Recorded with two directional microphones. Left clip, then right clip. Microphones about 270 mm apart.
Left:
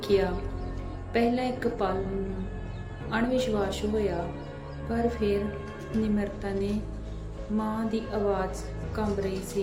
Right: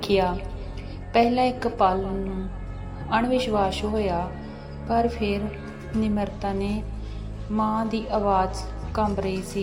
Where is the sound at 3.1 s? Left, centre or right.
Centre.